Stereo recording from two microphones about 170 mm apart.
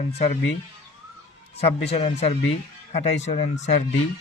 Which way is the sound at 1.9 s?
40° left (ahead or behind).